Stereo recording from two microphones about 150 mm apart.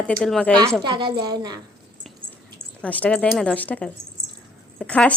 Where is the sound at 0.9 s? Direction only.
30° right (ahead or behind).